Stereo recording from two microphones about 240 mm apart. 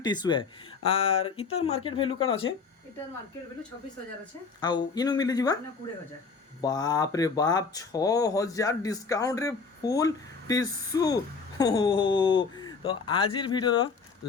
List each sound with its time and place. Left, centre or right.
0.0 s speech: centre
4.6 s speech: centre
6.6 s speech: centre